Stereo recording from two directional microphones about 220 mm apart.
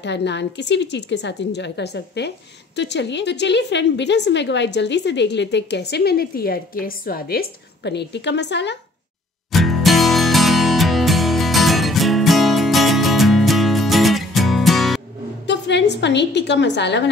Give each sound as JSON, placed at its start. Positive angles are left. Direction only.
{"t": 0.0, "sound": "a woman's voice", "side_deg": 55}
{"t": 9.5, "sound": "music", "side_deg": 0}
{"t": 15.4, "sound": "a woman's voice", "side_deg": 50}